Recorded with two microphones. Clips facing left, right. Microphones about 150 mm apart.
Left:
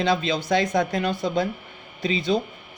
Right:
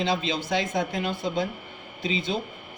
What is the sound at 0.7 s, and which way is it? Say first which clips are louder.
Speech: left 4 dB; 75° left (ahead or behind).